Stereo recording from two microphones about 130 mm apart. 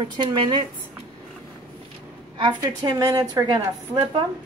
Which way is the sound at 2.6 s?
30° right (ahead or behind).